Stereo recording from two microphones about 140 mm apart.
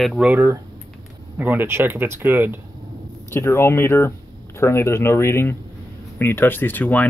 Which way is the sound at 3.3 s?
20° left (ahead or behind).